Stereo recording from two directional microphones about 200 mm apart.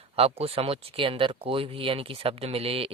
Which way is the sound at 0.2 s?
30° right (ahead or behind).